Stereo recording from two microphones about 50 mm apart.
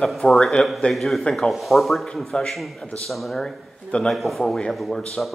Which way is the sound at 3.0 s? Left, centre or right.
Centre.